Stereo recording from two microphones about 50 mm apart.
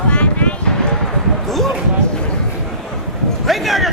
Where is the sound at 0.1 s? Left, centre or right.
Left.